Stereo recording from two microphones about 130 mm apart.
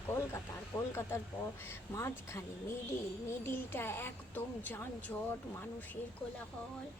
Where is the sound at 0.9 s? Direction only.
20° left (ahead or behind).